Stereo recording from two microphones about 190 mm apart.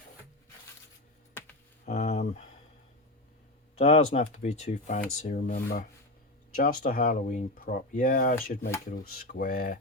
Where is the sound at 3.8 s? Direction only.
40° left (ahead or behind).